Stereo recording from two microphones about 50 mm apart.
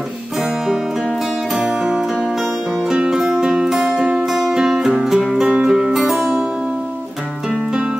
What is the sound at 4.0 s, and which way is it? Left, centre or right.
Music, right.